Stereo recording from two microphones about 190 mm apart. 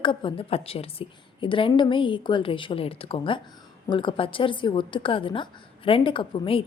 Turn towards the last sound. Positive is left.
turn(degrees=25)  # may be behind; listen again after turning